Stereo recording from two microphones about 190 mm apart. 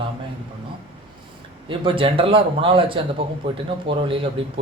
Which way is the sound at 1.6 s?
25° right (ahead or behind).